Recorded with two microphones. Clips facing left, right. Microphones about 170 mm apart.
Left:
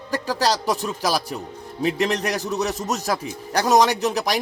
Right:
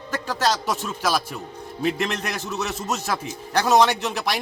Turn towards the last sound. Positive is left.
turn(degrees=40)  # may be behind; listen again after turning